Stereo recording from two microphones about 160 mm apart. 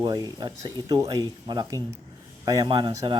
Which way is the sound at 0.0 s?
25° right (ahead or behind).